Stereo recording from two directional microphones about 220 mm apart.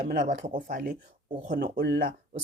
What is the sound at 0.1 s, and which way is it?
Speech, 35° right (ahead or behind).